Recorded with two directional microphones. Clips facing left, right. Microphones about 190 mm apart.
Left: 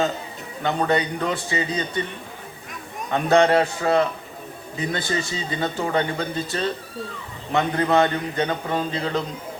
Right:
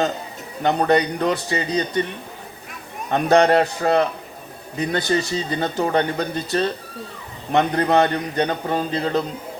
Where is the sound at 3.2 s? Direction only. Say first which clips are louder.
Right 2 dB; 35° right (ahead or behind).